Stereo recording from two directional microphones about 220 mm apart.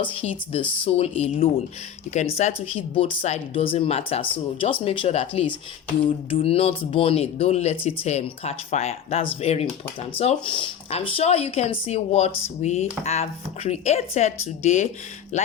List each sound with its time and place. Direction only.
0.0 s speech: 25° left (ahead or behind)